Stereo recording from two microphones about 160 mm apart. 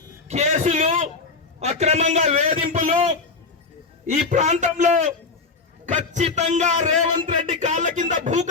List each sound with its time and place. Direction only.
0.3 s a man's voice: 45° right (ahead or behind)